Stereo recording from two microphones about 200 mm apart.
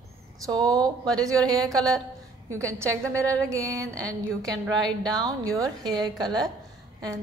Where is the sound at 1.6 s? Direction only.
Centre (ahead or behind).